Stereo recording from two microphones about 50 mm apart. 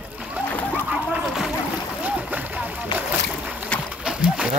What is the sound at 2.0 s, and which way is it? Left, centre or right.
Boat, right.